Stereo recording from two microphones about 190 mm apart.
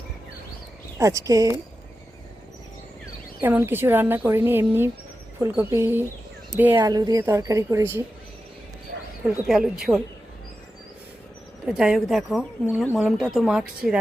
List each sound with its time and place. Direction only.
0.9 s speech: 15° right (ahead or behind)
3.4 s speech: 10° right (ahead or behind)
9.2 s speech: 5° right (ahead or behind)
11.6 s speech: 5° right (ahead or behind)